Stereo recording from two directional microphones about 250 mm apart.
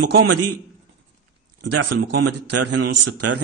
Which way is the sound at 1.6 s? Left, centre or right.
Right.